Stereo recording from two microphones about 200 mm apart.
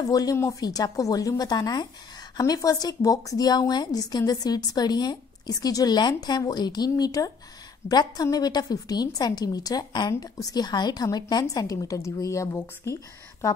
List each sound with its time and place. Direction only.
0.0 s a woman's voice: 20° left (ahead or behind)